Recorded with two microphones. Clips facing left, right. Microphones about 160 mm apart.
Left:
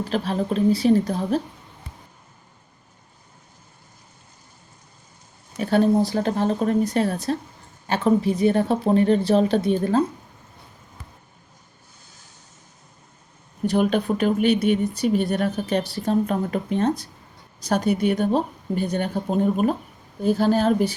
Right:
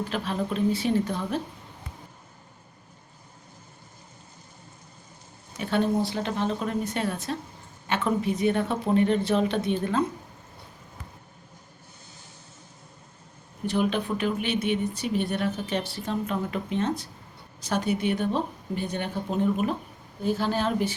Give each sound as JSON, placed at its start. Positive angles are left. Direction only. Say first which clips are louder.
{"t": 0.1, "sound": "a woman's voice", "louder": "left 5 dB", "side_deg": 35}
{"t": 5.5, "sound": "a woman's voice", "louder": "left 6 dB", "side_deg": 40}
{"t": 13.7, "sound": "a woman's voice", "louder": "left 5 dB", "side_deg": 45}